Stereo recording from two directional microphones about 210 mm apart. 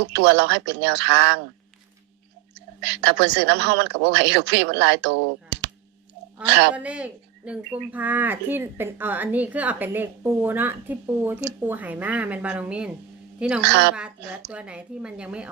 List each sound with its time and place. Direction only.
0.1 s speech: 55° right (ahead or behind)
2.8 s speech: 55° right (ahead or behind)
6.7 s speech: 5° right (ahead or behind)
13.6 s speech: 55° right (ahead or behind)
14.5 s a woman's voice: 5° right (ahead or behind)